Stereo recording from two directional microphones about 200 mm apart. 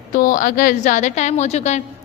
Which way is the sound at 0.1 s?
40° left (ahead or behind).